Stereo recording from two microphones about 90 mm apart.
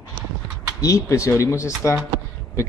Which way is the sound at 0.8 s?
35° left (ahead or behind).